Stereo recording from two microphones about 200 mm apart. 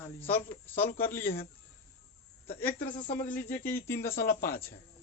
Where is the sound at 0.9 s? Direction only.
45° left (ahead or behind).